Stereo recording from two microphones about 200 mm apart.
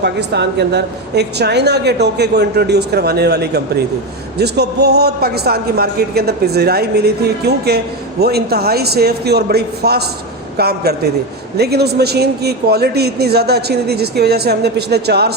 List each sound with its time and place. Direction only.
0.0 s a woman's voice: 55° right (ahead or behind)